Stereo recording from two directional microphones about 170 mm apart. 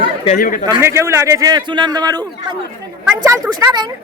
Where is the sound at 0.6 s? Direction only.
20° right (ahead or behind).